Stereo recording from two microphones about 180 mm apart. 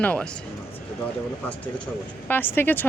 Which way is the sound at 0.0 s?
5° left (ahead or behind).